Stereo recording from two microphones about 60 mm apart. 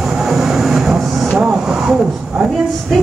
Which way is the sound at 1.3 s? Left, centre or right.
Centre.